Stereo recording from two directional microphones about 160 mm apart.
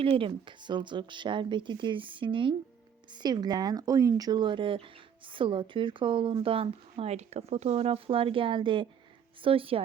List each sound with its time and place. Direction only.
0.0 s speech: 35° right (ahead or behind)